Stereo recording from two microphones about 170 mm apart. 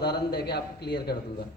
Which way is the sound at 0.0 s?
75° left (ahead or behind).